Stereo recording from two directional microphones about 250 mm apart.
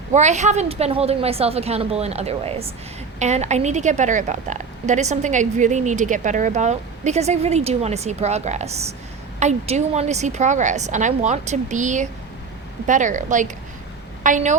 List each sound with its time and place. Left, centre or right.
0.1 s a woman's voice: right